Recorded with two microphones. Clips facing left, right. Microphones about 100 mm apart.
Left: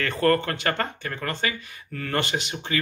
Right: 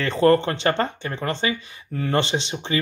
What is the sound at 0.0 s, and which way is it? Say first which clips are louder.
Speech: right 4 dB; 20° right (ahead or behind).